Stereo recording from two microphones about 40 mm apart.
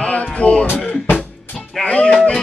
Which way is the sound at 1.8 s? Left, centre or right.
Left.